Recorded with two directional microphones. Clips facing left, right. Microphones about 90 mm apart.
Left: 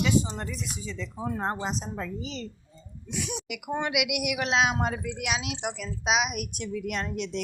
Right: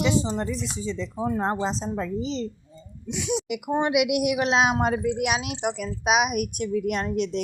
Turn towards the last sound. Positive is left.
turn(degrees=-50)  # may be behind; listen again after turning